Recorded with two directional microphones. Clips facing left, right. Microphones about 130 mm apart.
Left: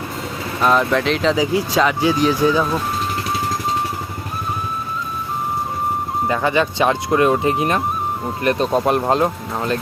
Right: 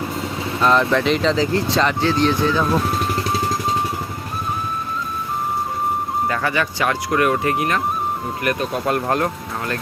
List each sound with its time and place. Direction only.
0.6 s speech: 5° left (ahead or behind)
6.2 s speech: 20° left (ahead or behind)